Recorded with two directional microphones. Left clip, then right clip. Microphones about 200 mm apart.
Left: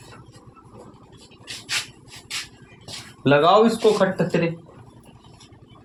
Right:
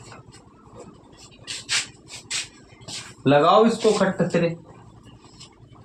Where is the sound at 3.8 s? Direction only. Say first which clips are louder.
Left 2 dB; 40° left (ahead or behind).